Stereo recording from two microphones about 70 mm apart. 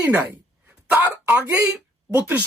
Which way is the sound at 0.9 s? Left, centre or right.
Right.